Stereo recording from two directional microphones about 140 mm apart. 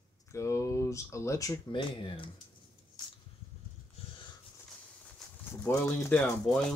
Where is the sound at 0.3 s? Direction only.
20° left (ahead or behind).